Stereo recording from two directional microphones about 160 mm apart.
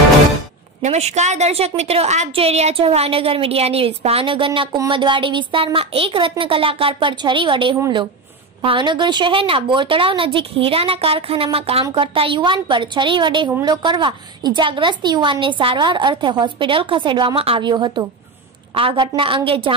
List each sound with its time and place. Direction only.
0.8 s a woman's voice: 45° right (ahead or behind)